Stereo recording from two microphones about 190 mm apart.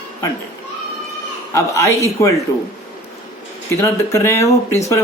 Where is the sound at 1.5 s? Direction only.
15° left (ahead or behind).